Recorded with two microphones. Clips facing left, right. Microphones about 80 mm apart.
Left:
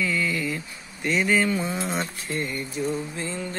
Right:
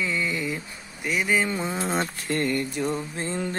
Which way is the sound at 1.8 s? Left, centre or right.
Right.